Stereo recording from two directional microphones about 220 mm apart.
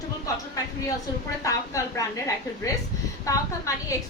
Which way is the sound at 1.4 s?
15° left (ahead or behind).